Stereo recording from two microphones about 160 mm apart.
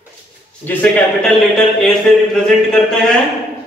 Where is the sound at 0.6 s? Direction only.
5° left (ahead or behind).